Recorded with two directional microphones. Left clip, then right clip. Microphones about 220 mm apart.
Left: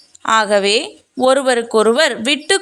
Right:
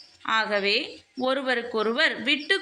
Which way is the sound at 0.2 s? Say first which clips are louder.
Left 11 dB; 55° left (ahead or behind).